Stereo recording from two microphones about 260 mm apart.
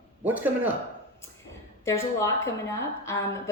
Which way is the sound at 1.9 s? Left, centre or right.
Centre.